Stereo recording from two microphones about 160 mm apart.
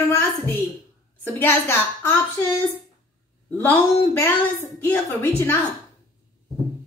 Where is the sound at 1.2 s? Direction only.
15° left (ahead or behind).